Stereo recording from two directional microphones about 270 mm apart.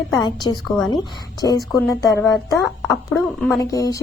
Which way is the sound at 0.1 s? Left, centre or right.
Centre.